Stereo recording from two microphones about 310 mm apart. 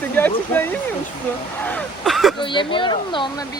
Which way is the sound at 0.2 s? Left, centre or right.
Centre.